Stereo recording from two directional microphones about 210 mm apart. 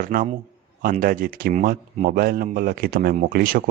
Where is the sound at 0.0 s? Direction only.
40° right (ahead or behind).